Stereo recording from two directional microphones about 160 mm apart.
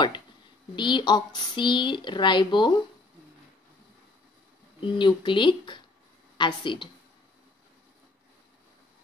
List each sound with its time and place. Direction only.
0.7 s speech: 30° left (ahead or behind)
4.7 s speech: 30° left (ahead or behind)